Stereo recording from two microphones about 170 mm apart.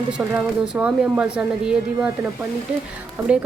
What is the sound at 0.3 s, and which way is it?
Speech, 5° right (ahead or behind).